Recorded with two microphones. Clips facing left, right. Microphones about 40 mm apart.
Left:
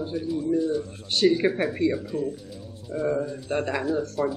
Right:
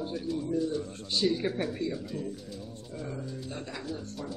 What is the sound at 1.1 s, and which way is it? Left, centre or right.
Speech, left.